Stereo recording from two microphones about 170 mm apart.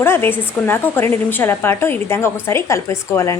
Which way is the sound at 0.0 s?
15° left (ahead or behind).